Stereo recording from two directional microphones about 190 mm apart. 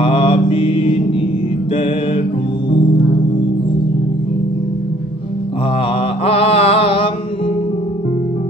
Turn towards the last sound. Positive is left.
turn(degrees=30)  # may be behind; listen again after turning